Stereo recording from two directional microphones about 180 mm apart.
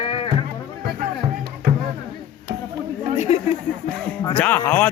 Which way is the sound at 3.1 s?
40° left (ahead or behind).